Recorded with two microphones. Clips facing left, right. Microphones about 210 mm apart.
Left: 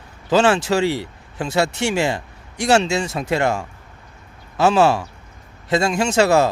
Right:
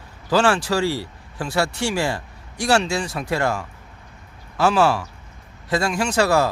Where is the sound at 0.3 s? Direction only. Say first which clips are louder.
Left 3 dB; 20° left (ahead or behind).